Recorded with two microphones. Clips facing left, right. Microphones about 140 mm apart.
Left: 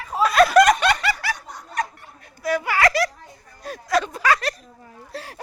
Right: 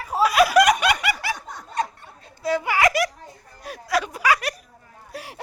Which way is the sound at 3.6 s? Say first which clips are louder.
Left 2 dB; 5° right (ahead or behind).